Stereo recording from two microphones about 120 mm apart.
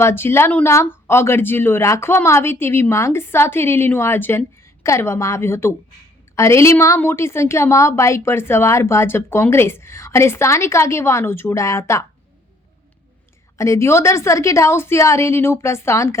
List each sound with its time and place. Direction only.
0.0 s speech: 20° left (ahead or behind)
13.6 s speech: 25° left (ahead or behind)